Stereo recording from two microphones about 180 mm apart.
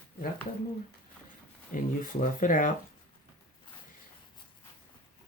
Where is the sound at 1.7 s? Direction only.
50° left (ahead or behind).